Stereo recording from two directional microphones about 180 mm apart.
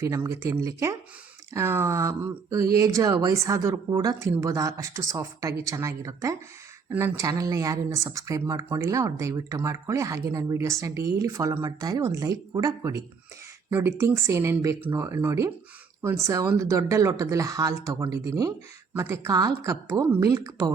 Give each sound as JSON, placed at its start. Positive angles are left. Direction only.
{"t": 0.0, "sound": "speech", "side_deg": -15}